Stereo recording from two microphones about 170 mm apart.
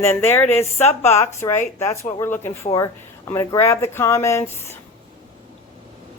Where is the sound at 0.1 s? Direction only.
15° left (ahead or behind).